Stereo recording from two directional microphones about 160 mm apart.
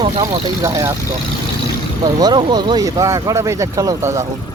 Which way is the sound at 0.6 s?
20° right (ahead or behind).